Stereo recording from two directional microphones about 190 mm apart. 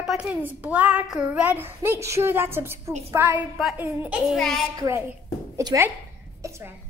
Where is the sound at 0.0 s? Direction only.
Centre (ahead or behind).